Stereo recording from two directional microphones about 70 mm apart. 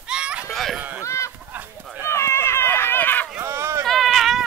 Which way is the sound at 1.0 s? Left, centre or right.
Left.